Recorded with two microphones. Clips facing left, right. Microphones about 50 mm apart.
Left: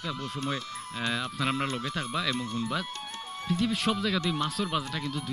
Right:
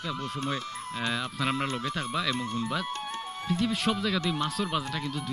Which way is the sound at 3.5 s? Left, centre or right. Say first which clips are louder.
Even; centre.